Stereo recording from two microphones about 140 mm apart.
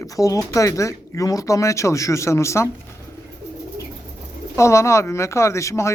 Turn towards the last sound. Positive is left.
turn(degrees=20)  # may be behind; listen again after turning